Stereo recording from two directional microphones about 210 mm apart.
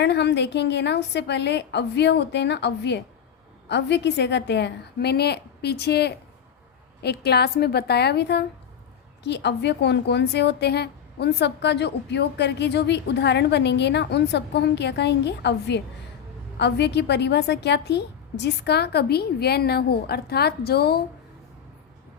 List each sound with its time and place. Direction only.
0.0 s a woman's voice: 55° left (ahead or behind)